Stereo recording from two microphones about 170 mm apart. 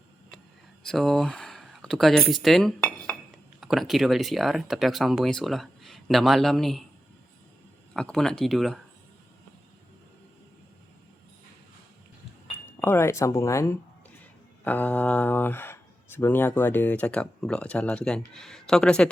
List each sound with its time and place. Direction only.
0.9 s speech: centre (ahead or behind)
7.9 s speech: 5° left (ahead or behind)
12.6 s speech: 10° left (ahead or behind)